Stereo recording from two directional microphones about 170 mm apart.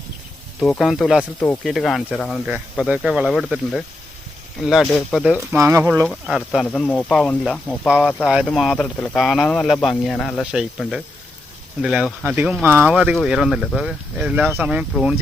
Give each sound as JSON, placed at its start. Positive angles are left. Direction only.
{"t": 0.6, "sound": "speech", "side_deg": 0}
{"t": 5.5, "sound": "speech", "side_deg": -15}
{"t": 5.9, "sound": "speech", "side_deg": -5}